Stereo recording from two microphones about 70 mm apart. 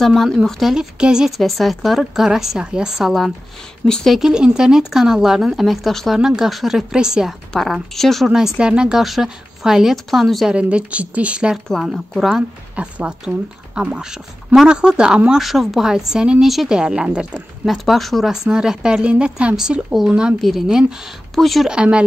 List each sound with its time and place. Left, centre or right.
0.0 s a woman's voice: centre
1.4 s a woman's voice: centre
3.8 s speech: centre
4.2 s a woman's voice: centre
7.7 s a woman's voice: centre
8.5 s a woman's voice: centre
10.5 s a woman's voice: centre
11.5 s a woman's voice: centre
12.7 s a woman's voice: centre
17.6 s a woman's voice: centre
18.3 s a woman's voice: centre
20.3 s a woman's voice: centre
21.6 s a woman's voice: centre